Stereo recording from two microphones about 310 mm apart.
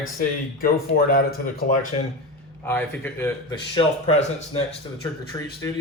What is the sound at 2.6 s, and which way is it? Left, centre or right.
A man's voice, centre.